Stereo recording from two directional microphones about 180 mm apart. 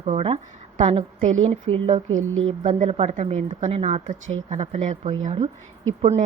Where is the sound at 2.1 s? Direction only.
90° right.